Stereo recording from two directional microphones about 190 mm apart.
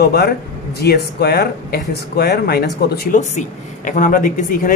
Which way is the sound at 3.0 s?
40° left (ahead or behind).